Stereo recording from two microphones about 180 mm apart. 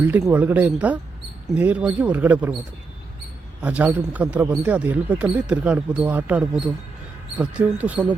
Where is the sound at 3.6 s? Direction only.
10° right (ahead or behind).